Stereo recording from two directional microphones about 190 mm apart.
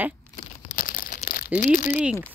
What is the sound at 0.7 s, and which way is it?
Crumpling, 50° left (ahead or behind).